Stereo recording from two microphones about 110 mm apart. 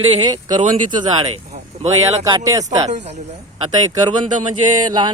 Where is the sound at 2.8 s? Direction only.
90° right.